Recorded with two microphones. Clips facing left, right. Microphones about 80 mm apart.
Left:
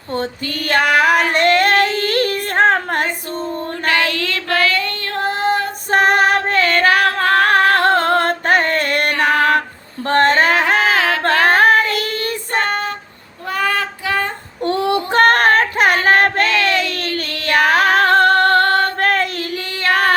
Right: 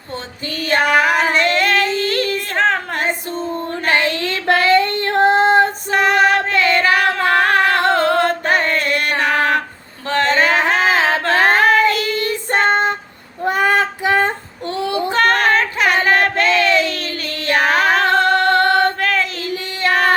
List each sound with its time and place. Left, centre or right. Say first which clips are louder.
0.6 s female singing: even; left
4.1 s child singing: right 3 dB; right
5.9 s music: left 3 dB; left
7.9 s a sound: even; left
10.9 s a sound: right 1 dB; right
11.5 s child singing: even; left
12.5 s child singing: right 5 dB; right
13.4 s female singing: right 4 dB; right
14.6 s child singing: left 3 dB; left
18.9 s female singing: left 2 dB; left